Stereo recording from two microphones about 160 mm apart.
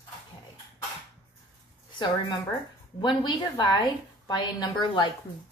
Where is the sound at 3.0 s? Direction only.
30° left (ahead or behind).